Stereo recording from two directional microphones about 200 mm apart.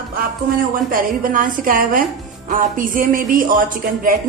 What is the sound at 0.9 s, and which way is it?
Speech, 45° right (ahead or behind).